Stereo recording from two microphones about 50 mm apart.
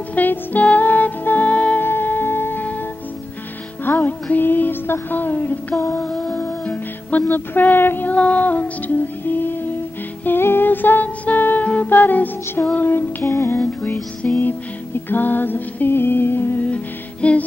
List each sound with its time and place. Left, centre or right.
0.1 s music: left
1.8 s music: left
3.8 s music: left
6.0 s music: centre
6.7 s music: left
8.1 s music: left
13.2 s music: left
14.2 s music: left
15.0 s a sound: left
16.6 s music: left